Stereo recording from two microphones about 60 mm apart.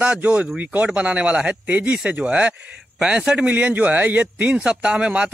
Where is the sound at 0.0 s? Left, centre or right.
Right.